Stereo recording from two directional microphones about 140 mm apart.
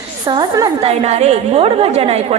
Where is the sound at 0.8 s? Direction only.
50° right (ahead or behind).